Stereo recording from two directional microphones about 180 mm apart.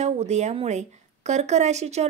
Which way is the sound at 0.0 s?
40° right (ahead or behind).